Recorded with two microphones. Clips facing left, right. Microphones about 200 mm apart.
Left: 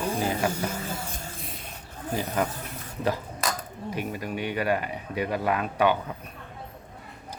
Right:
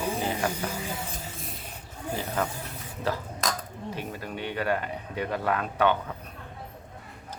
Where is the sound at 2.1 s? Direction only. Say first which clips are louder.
Left 3 dB; 10° left (ahead or behind).